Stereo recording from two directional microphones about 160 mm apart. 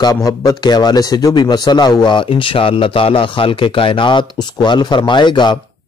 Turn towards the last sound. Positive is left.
turn(degrees=30)  # may be behind; listen again after turning